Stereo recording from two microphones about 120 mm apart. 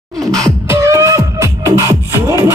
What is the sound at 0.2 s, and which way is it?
Beatboxing, 5° left (ahead or behind).